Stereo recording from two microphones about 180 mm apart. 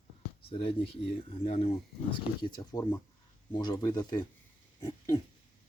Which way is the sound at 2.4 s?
20° left (ahead or behind).